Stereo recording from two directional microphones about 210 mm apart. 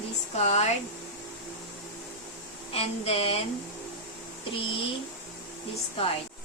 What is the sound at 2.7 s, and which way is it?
Speech, 30° left (ahead or behind).